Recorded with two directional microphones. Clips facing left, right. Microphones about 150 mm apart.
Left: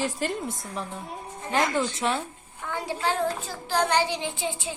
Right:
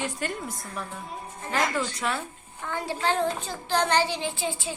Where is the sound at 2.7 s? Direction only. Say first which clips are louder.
Right 1 dB; 10° left (ahead or behind).